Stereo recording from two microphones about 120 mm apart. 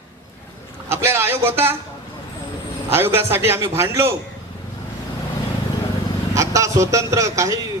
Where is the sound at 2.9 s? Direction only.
20° right (ahead or behind).